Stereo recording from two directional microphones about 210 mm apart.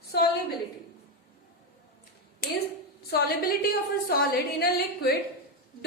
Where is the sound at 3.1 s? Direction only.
45° left (ahead or behind).